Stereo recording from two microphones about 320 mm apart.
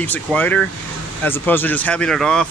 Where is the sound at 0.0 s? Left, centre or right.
Centre.